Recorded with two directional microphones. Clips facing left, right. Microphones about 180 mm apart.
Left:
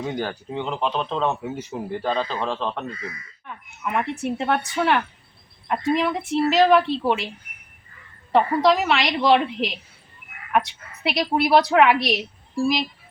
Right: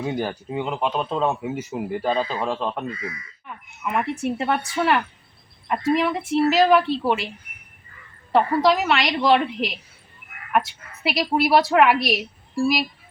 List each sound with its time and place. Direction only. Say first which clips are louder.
0.0 s a woman's voice: right 2 dB; 10° right (ahead or behind)
8.3 s a woman's voice: even; centre (ahead or behind)